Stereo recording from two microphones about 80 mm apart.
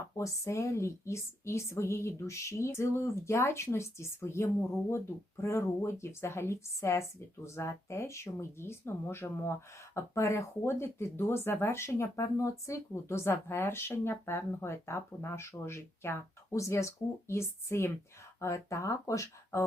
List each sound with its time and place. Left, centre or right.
0.2 s speech: left